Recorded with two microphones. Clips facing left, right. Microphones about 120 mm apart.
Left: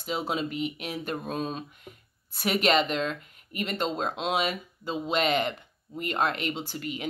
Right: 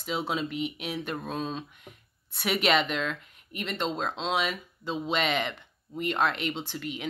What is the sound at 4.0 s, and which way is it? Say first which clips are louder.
Speech: left 1 dB; 50° left (ahead or behind).